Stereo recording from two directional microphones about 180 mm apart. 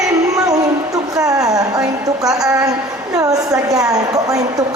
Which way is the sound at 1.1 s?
20° right (ahead or behind).